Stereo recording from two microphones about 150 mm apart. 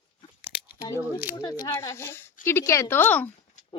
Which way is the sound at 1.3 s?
25° left (ahead or behind).